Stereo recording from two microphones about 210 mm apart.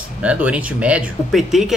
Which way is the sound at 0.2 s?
5° right (ahead or behind).